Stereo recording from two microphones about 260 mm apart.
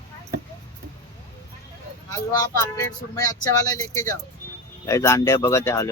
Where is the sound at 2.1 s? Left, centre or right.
Centre.